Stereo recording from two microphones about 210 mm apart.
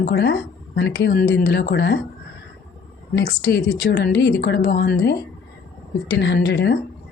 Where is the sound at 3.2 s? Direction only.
50° left (ahead or behind).